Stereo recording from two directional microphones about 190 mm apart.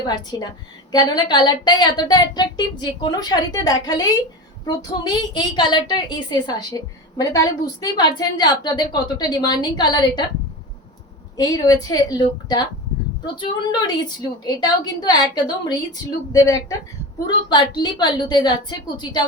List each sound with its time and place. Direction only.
0.1 s a woman's voice: 20° left (ahead or behind)
11.3 s a woman's voice: 20° left (ahead or behind)